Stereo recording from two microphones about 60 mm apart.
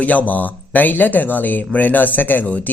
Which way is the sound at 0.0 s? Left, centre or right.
Left.